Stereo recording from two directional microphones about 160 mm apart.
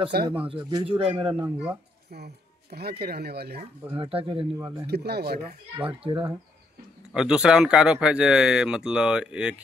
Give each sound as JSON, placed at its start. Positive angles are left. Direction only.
{"t": 0.1, "sound": "speech", "side_deg": -75}
{"t": 0.5, "sound": "speech", "side_deg": -25}
{"t": 0.8, "sound": "speech", "side_deg": -35}
{"t": 1.4, "sound": "speech", "side_deg": -10}
{"t": 2.0, "sound": "speech", "side_deg": -90}
{"t": 3.9, "sound": "speech", "side_deg": -35}
{"t": 4.6, "sound": "speech", "side_deg": -20}
{"t": 4.8, "sound": "speech", "side_deg": -90}
{"t": 5.9, "sound": "speech", "side_deg": -35}
{"t": 7.2, "sound": "speech", "side_deg": -5}